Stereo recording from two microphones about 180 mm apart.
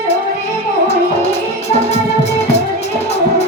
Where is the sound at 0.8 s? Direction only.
35° left (ahead or behind).